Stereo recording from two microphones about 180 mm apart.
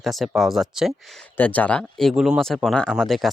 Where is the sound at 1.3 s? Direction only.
10° left (ahead or behind).